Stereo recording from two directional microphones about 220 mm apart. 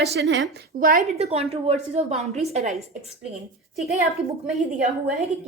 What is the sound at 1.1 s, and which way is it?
A woman's voice, 30° right (ahead or behind).